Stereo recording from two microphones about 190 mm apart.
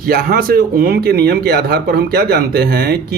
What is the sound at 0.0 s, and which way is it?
Speech, 50° right (ahead or behind).